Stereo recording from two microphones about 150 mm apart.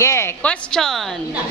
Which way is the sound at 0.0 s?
20° left (ahead or behind).